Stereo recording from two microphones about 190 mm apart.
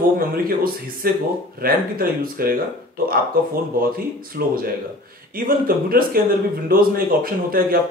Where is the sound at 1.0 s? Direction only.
50° right (ahead or behind).